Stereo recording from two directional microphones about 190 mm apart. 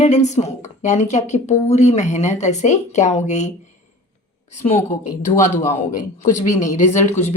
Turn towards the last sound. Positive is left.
turn(degrees=40)  # may be behind; listen again after turning